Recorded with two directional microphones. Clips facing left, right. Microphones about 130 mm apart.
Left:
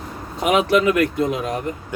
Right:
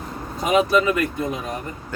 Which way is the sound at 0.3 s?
80° left.